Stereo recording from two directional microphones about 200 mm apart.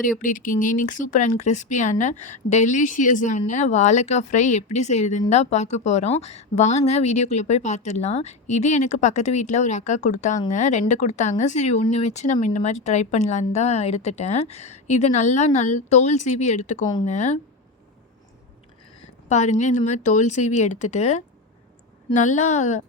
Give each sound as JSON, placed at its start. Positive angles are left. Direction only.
{"t": 0.0, "sound": "speech", "side_deg": 40}
{"t": 19.3, "sound": "speech", "side_deg": 35}